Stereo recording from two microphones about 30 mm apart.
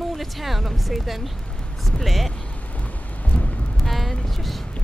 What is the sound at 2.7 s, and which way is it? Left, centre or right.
Thunder, left.